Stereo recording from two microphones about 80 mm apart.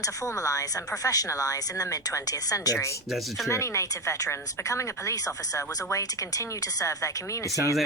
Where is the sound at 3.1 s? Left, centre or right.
Centre.